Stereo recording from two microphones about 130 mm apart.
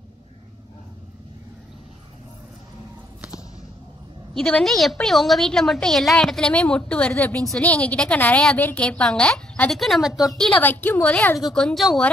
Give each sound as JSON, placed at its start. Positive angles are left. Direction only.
{"t": 4.3, "sound": "a woman's voice", "side_deg": 5}
{"t": 10.6, "sound": "a woman's voice", "side_deg": 15}